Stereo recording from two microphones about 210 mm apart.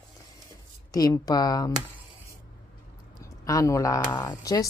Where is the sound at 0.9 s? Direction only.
15° left (ahead or behind).